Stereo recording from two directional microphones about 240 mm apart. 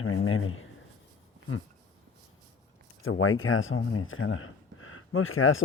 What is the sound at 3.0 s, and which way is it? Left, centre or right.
Speech, left.